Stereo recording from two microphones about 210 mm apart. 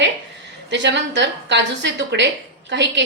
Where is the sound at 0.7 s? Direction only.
55° right (ahead or behind).